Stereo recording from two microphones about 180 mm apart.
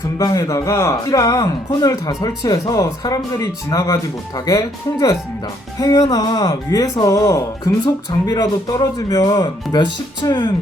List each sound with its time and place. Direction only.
0.2 s speech: 20° left (ahead or behind)